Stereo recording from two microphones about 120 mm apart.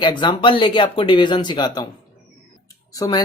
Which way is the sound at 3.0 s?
30° left (ahead or behind).